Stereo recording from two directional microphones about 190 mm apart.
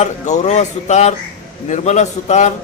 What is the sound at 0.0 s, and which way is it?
A man's voice, 35° left (ahead or behind).